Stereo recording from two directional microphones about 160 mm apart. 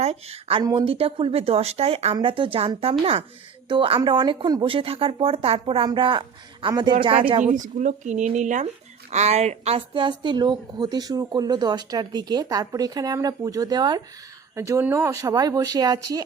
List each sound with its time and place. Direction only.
0.0 s a woman's voice: 40° right (ahead or behind)
0.6 s a woman's voice: 25° right (ahead or behind)
0.9 s speech: 35° right (ahead or behind)
7.4 s a woman's voice: 50° right (ahead or behind); by 16.2 s 25° right (ahead or behind)